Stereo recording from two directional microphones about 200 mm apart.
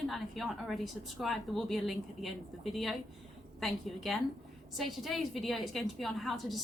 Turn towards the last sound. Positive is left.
turn(degrees=0)  # may be behind; listen again after turning